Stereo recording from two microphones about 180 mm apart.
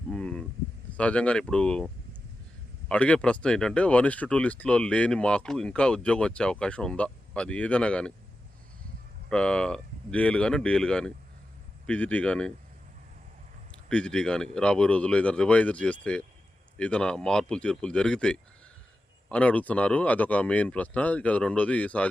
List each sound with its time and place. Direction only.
0.1 s a sound: 5° left (ahead or behind)
0.9 s speech: 5° left (ahead or behind)
2.9 s speech: 5° left (ahead or behind)
9.3 s speech: 5° left (ahead or behind)
13.7 s speech: 5° left (ahead or behind)